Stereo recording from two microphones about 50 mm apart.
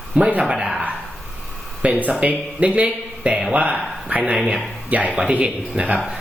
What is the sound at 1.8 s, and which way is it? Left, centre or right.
Speech, right.